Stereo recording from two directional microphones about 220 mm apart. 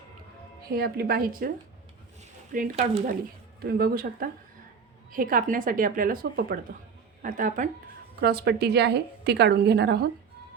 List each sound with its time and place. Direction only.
0.7 s a woman's voice: 45° right (ahead or behind)
2.5 s a woman's voice: 40° right (ahead or behind)